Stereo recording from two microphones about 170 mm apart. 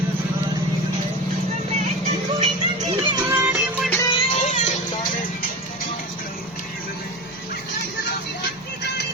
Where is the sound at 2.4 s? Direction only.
40° right (ahead or behind).